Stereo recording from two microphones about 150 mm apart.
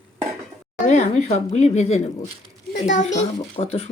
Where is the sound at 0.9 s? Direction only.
50° left (ahead or behind).